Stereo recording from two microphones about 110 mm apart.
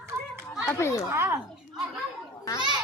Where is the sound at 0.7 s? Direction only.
25° left (ahead or behind).